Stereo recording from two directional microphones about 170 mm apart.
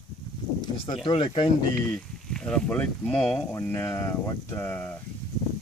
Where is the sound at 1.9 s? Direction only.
5° left (ahead or behind).